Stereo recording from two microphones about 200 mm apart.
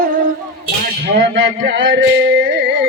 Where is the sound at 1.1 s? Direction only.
55° right (ahead or behind).